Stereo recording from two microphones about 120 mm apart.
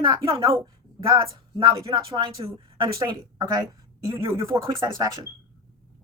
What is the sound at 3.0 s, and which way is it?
Speech, 30° right (ahead or behind).